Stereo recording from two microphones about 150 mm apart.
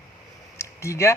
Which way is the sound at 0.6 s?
20° left (ahead or behind).